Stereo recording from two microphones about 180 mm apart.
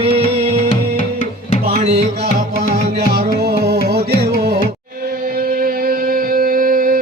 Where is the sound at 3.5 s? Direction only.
65° right (ahead or behind).